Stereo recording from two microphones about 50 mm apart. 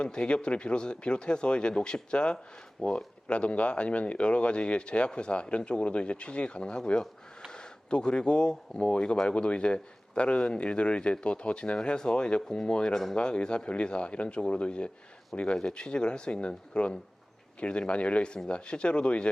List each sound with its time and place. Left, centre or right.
0.0 s speech: centre